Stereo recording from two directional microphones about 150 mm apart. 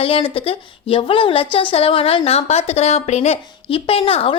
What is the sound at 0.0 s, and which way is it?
A woman's voice, 40° left (ahead or behind).